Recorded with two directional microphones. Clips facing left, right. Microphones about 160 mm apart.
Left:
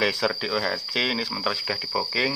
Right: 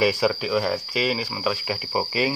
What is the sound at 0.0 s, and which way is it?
Speech, 10° right (ahead or behind).